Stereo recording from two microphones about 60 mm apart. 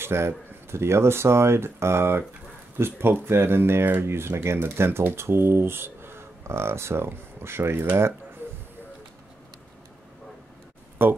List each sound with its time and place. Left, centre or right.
0.0 s speech: right
11.0 s speech: right